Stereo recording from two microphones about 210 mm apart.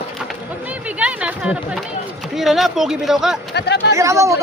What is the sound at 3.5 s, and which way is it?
Chatter, 50° left (ahead or behind).